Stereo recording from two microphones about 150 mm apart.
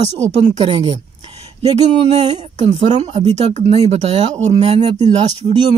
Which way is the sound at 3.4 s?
45° right (ahead or behind).